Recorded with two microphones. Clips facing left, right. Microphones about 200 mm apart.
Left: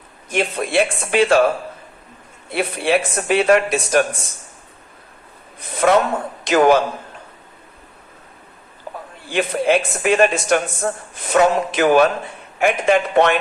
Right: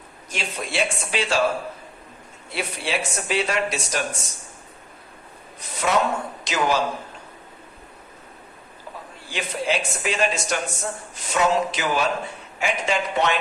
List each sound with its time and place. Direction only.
0.3 s a man's voice: 55° left (ahead or behind)
2.5 s a man's voice: 55° left (ahead or behind)
5.5 s a sound: 55° left (ahead or behind)
6.4 s a man's voice: 55° left (ahead or behind)
9.3 s a man's voice: 55° left (ahead or behind)